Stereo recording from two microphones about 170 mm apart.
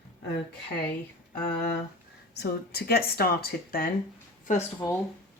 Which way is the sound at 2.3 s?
70° left (ahead or behind).